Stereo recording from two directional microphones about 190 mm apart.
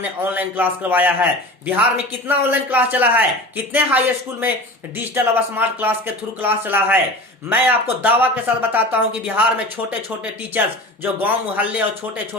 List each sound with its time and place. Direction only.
0.0 s a man's voice: 10° right (ahead or behind)
11.0 s a man's voice: 10° right (ahead or behind)